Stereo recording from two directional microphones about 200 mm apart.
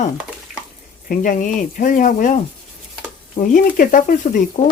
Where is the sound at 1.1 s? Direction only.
40° left (ahead or behind).